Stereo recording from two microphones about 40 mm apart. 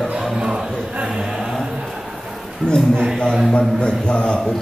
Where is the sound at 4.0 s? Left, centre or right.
Left.